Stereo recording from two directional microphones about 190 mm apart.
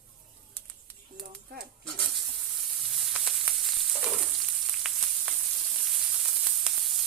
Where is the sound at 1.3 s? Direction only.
55° right (ahead or behind).